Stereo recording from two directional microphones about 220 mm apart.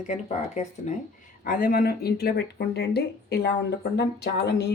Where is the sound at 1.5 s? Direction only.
40° left (ahead or behind).